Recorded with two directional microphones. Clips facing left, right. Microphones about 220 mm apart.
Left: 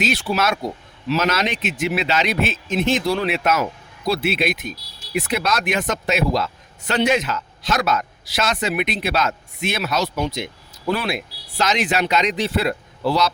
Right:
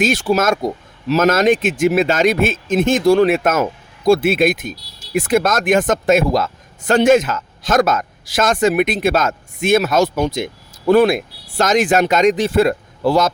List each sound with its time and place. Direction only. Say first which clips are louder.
0.0 s speech: right 6 dB; 45° right (ahead or behind)